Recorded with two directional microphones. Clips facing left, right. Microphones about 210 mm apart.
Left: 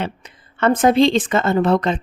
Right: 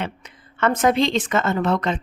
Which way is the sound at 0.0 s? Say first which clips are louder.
Left 3 dB; 30° left (ahead or behind).